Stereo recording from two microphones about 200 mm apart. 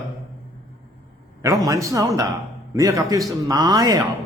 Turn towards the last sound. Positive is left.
turn(degrees=-15)  # may be behind; listen again after turning